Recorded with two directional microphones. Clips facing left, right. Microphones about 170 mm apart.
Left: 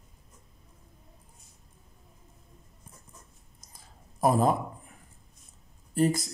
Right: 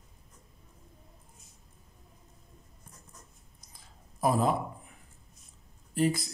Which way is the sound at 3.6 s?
45° left (ahead or behind).